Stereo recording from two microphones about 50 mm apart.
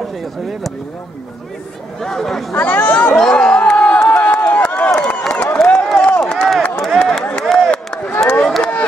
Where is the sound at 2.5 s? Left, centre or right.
Left.